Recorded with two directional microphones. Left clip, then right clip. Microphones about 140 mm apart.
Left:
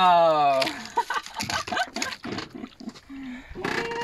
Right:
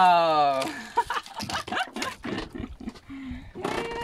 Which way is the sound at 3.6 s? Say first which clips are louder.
Left 2 dB; 25° right (ahead or behind).